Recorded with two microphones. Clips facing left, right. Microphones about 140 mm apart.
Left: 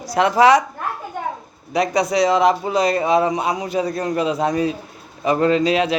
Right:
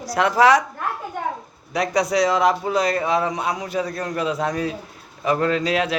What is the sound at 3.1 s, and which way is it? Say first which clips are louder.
A man's voice: left 4 dB; 20° left (ahead or behind).